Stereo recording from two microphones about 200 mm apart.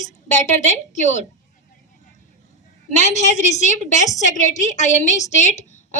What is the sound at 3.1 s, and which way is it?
A woman's voice, 35° left (ahead or behind).